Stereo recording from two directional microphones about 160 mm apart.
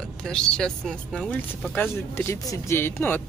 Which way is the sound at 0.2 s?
5° left (ahead or behind).